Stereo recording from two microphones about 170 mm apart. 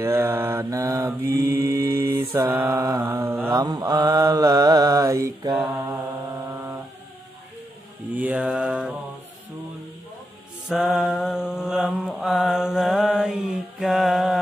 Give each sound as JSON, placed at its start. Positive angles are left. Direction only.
{"t": 0.0, "sound": "mantra", "side_deg": -15}
{"t": 8.1, "sound": "mantra", "side_deg": -10}
{"t": 10.7, "sound": "mantra", "side_deg": -5}